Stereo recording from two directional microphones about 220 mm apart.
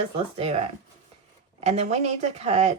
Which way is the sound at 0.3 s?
25° right (ahead or behind).